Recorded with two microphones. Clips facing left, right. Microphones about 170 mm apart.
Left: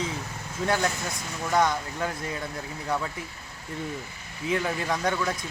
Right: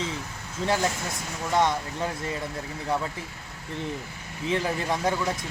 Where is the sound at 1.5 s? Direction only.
25° right (ahead or behind).